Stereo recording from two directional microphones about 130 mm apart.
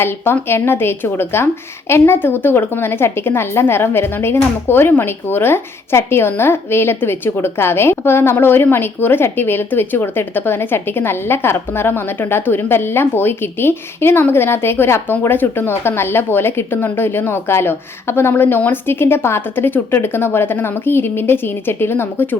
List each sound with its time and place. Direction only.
0.0 s speech: 20° left (ahead or behind)